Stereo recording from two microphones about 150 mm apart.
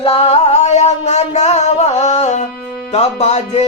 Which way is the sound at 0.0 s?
40° left (ahead or behind).